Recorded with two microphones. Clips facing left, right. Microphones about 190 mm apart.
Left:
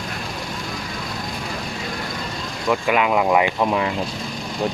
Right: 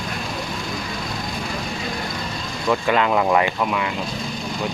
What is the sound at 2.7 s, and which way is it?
Speech, 10° left (ahead or behind).